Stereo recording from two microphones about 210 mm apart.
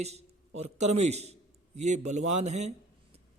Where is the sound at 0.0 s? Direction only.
30° right (ahead or behind).